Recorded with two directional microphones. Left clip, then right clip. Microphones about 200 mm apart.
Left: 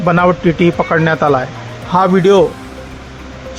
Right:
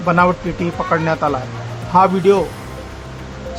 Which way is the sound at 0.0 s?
25° left (ahead or behind).